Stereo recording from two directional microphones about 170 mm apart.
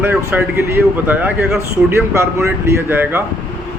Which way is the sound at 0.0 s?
15° right (ahead or behind).